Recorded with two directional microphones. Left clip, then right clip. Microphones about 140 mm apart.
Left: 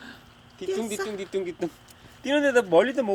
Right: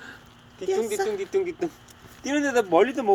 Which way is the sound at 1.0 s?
25° left (ahead or behind).